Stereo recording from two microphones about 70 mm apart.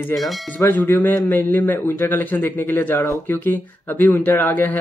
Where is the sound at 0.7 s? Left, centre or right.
Left.